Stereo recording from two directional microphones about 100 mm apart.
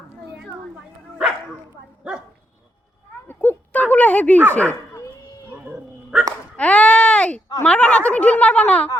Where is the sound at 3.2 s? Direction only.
20° left (ahead or behind).